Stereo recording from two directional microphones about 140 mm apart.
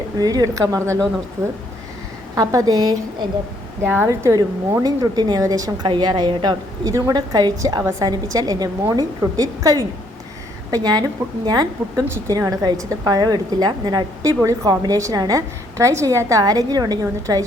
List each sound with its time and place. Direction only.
0.2 s a woman's voice: 25° right (ahead or behind)
2.3 s a woman's voice: 25° right (ahead or behind)
12.0 s a woman's voice: 20° right (ahead or behind)